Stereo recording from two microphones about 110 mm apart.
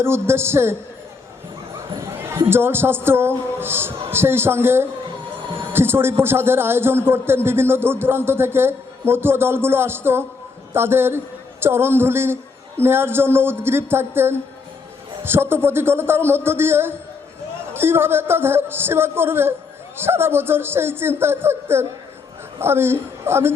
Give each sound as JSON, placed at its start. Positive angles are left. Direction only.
{"t": 0.0, "sound": "a man's voice", "side_deg": -20}
{"t": 2.0, "sound": "a man's voice", "side_deg": -25}